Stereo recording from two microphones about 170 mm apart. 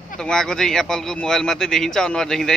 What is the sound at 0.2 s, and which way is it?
Speech, 5° left (ahead or behind).